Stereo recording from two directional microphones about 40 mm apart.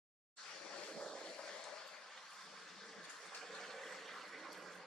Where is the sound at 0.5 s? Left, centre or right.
Centre.